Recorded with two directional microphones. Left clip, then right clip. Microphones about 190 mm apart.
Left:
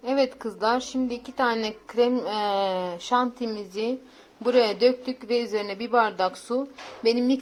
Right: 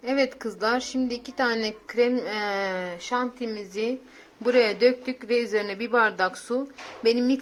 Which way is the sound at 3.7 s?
Centre (ahead or behind).